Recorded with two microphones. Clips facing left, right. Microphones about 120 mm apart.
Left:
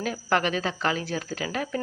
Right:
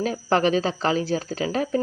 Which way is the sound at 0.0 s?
30° right (ahead or behind).